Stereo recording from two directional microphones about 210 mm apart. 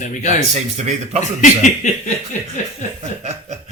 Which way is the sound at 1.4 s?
35° left (ahead or behind).